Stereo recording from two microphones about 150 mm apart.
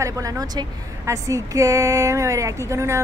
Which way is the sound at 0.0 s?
25° right (ahead or behind).